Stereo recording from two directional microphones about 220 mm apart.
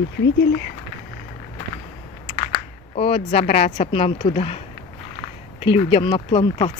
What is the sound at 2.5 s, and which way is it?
Speech, 25° left (ahead or behind).